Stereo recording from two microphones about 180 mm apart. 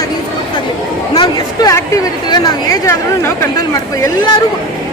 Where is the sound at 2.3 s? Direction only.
20° left (ahead or behind).